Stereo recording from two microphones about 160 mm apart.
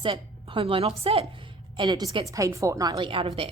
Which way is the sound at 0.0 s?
35° right (ahead or behind).